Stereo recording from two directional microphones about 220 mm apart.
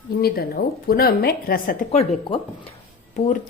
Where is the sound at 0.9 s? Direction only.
45° left (ahead or behind).